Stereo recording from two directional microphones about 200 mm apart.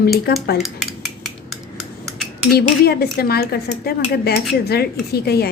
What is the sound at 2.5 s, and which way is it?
Speech, 50° left (ahead or behind).